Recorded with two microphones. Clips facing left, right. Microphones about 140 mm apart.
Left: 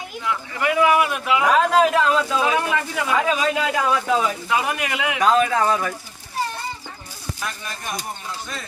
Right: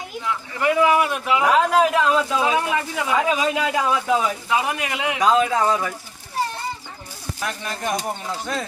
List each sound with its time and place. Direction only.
0.6 s speech: 30° right (ahead or behind)
1.4 s a man's voice: 10° right (ahead or behind)
7.4 s speech: 70° right (ahead or behind)